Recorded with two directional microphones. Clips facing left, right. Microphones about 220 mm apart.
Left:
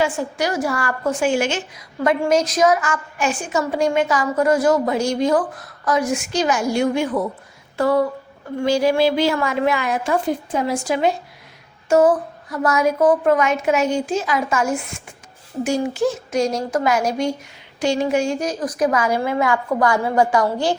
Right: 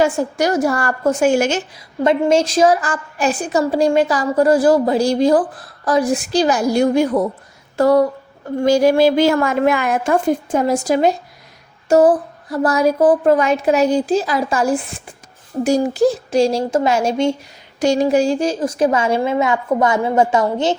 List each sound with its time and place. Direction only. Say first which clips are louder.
0.0 s a woman's voice: right 5 dB; 40° right (ahead or behind)
2.0 s a woman's voice: right 3 dB; 25° right (ahead or behind)
17.7 s a woman's voice: right 4 dB; 40° right (ahead or behind); by 20.7 s 25° right (ahead or behind)